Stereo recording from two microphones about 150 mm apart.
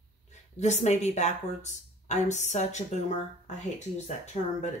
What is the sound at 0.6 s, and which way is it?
A woman's voice, 50° left (ahead or behind).